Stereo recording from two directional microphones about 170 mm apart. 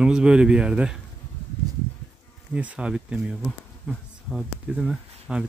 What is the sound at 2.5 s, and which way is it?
Speech, 5° right (ahead or behind).